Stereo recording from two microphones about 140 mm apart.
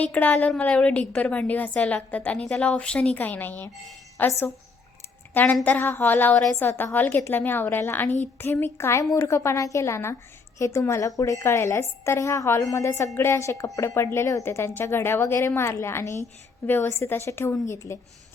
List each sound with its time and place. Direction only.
0.0 s a woman's voice: 10° left (ahead or behind)